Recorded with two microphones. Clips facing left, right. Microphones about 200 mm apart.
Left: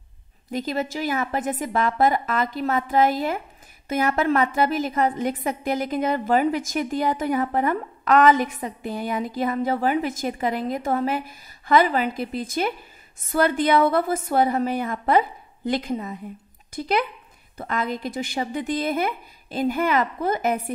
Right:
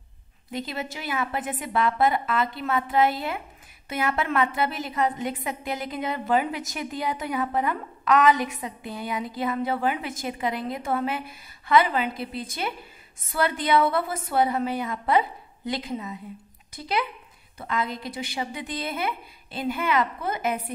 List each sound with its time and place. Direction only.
0.5 s a woman's voice: 45° left (ahead or behind)
17.6 s a woman's voice: 50° left (ahead or behind)